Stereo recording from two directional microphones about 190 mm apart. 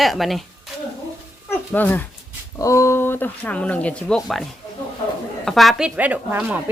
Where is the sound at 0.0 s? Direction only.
Centre (ahead or behind).